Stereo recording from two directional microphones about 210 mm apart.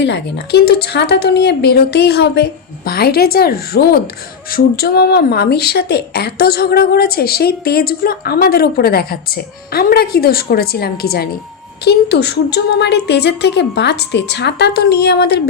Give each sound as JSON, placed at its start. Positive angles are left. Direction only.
{"t": 0.0, "sound": "speech", "side_deg": 50}